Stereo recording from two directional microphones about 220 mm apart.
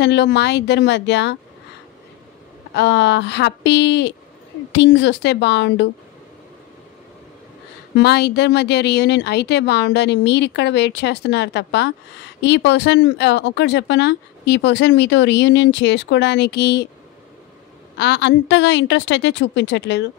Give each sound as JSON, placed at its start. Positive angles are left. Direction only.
{"t": 0.0, "sound": "speech", "side_deg": 50}
{"t": 2.7, "sound": "speech", "side_deg": 55}
{"t": 8.0, "sound": "speech", "side_deg": 50}
{"t": 17.9, "sound": "speech", "side_deg": 50}